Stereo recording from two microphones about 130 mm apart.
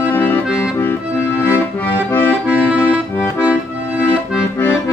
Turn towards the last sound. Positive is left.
turn(degrees=15)  # may be behind; listen again after turning